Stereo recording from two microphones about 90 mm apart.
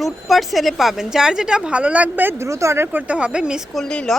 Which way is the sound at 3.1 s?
15° right (ahead or behind).